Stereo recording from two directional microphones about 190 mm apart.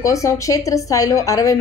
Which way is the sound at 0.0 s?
15° left (ahead or behind).